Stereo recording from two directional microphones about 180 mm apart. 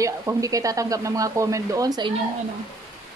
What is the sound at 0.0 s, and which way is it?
Speech, 20° right (ahead or behind).